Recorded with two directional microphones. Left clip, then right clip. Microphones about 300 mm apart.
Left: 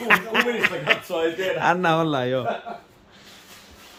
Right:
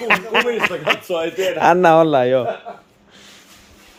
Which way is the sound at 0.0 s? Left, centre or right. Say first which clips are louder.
Right 3 dB; centre.